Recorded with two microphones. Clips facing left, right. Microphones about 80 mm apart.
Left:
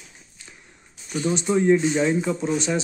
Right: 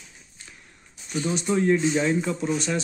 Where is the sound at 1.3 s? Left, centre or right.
Centre.